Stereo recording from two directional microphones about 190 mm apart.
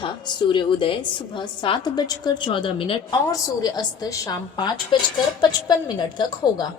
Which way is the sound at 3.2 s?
15° left (ahead or behind).